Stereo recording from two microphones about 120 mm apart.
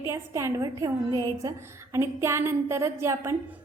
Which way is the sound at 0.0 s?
20° right (ahead or behind).